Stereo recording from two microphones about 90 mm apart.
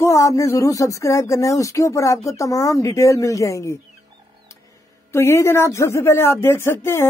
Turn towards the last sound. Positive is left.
turn(degrees=30)  # may be behind; listen again after turning